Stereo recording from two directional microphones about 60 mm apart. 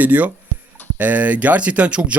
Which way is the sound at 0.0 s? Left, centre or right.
Right.